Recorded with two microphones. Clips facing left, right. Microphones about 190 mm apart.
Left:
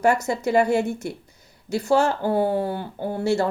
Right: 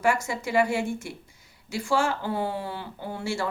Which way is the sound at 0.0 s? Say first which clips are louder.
Left 5 dB; 40° left (ahead or behind).